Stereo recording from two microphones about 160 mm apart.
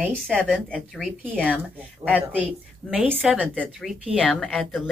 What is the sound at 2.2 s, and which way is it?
A woman's voice, 10° right (ahead or behind).